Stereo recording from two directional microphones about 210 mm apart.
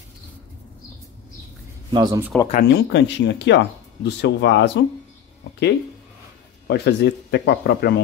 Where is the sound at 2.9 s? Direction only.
60° left (ahead or behind).